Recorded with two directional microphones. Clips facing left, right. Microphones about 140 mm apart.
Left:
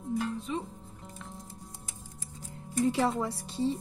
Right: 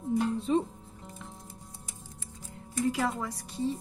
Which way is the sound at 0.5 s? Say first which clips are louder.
Right 8 dB; 35° right (ahead or behind).